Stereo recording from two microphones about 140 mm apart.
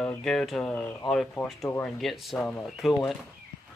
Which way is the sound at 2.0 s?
Centre (ahead or behind).